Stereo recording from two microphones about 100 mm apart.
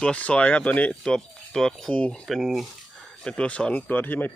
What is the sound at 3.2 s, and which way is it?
Speech, 10° left (ahead or behind).